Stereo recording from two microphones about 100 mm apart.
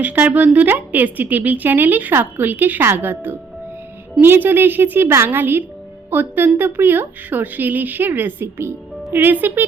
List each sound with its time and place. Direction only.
0.0 s speech: 15° right (ahead or behind)